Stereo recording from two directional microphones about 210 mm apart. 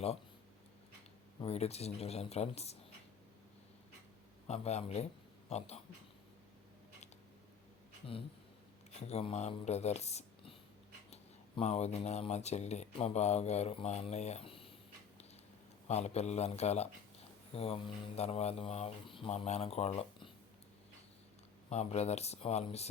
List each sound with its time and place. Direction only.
1.4 s speech: 30° left (ahead or behind)
4.4 s speech: 30° left (ahead or behind)
9.0 s speech: 30° left (ahead or behind)
15.9 s speech: 30° left (ahead or behind)
21.7 s speech: 30° left (ahead or behind)